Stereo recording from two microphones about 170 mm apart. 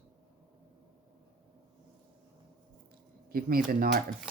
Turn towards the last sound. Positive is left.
turn(degrees=-55)  # may be behind; listen again after turning